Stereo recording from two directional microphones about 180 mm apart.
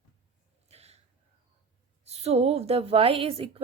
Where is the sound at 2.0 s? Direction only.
35° right (ahead or behind).